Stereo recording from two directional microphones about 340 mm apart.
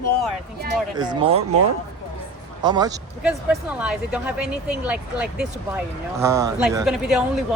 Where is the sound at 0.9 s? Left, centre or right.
Centre.